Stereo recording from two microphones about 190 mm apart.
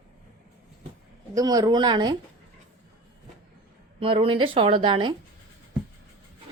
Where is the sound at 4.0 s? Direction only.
30° right (ahead or behind).